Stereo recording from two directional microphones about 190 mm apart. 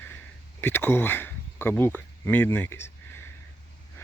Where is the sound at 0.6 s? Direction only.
10° left (ahead or behind).